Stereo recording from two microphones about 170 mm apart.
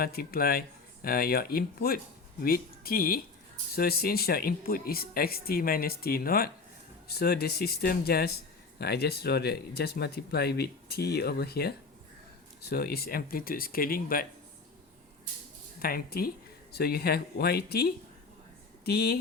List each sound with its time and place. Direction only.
0.0 s speech: 60° left (ahead or behind)
15.8 s speech: 60° left (ahead or behind)